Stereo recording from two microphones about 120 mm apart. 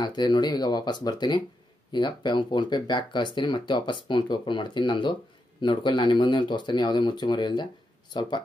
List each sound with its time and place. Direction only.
0.0 s speech: 40° left (ahead or behind)